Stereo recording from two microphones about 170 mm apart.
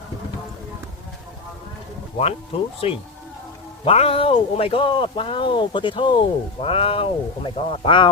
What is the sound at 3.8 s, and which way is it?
Speech, 35° left (ahead or behind).